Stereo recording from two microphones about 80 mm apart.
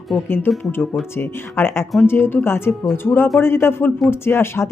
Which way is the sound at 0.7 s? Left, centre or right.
Left.